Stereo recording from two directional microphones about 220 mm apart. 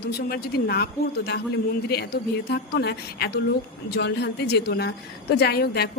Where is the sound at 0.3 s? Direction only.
45° left (ahead or behind).